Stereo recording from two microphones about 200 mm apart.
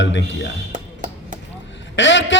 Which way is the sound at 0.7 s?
40° right (ahead or behind).